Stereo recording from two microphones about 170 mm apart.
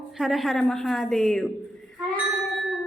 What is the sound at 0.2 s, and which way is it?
A woman's voice, centre (ahead or behind).